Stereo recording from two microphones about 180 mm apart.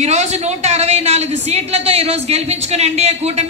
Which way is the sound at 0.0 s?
40° right (ahead or behind).